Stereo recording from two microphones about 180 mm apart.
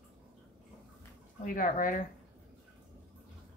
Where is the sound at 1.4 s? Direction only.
50° left (ahead or behind).